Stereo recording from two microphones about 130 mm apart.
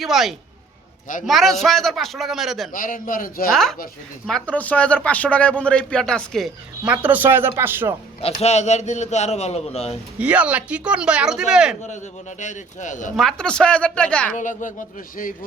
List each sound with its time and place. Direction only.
0.0 s a man's voice: centre (ahead or behind)
2.7 s a man's voice: 90° left
3.5 s a man's voice: centre (ahead or behind)
6.8 s speech: 10° right (ahead or behind)
8.2 s a man's voice: 55° left (ahead or behind)
10.2 s speech: 10° right (ahead or behind)
12.4 s speech: 70° left (ahead or behind)
13.1 s a man's voice: 5° left (ahead or behind)
14.3 s speech: 80° left